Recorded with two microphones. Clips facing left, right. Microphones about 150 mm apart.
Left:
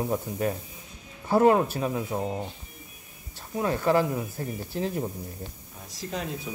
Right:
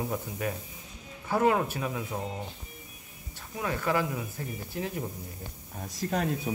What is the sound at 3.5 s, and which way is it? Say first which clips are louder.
Speech: left 6 dB; 35° left (ahead or behind).